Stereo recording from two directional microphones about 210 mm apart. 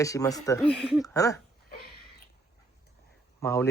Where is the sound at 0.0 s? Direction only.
15° left (ahead or behind).